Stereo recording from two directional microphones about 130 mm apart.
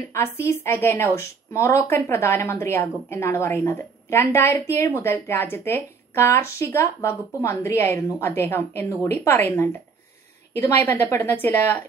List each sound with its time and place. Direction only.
0.1 s a woman's voice: 20° left (ahead or behind)